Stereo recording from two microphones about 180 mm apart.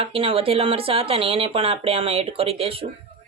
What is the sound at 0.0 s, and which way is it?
Speech, 30° right (ahead or behind).